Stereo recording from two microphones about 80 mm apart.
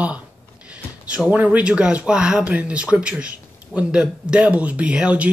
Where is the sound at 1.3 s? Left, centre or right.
Centre.